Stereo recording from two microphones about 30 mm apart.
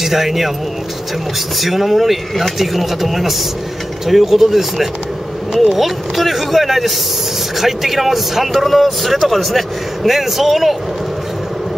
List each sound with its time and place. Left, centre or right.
0.0 s speech: centre
1.6 s speech: centre